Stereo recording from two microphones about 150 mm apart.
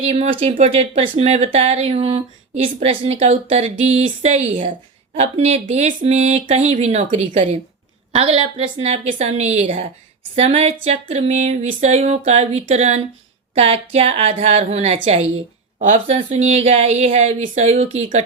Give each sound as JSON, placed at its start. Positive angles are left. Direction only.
{"t": 0.0, "sound": "a woman's voice", "side_deg": -35}